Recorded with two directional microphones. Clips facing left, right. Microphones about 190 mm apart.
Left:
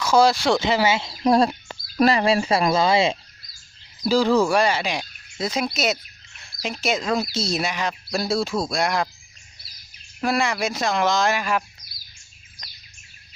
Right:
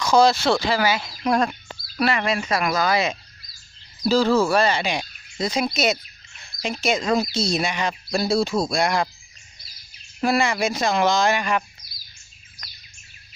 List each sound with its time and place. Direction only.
0.0 s speech: 10° left (ahead or behind); by 3.2 s 25° left (ahead or behind)
4.1 s speech: 15° left (ahead or behind)
4.8 s speech: centre (ahead or behind)
10.2 s speech: centre (ahead or behind)